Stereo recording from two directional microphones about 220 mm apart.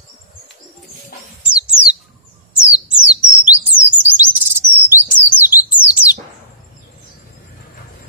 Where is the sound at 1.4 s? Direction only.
5° right (ahead or behind).